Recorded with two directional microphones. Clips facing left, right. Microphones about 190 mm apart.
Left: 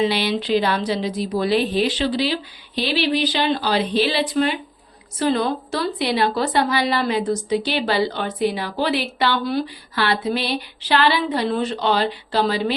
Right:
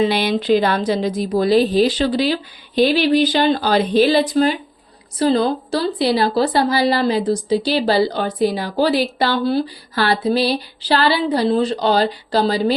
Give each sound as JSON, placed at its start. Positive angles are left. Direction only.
{"t": 0.0, "sound": "a woman's voice", "side_deg": -50}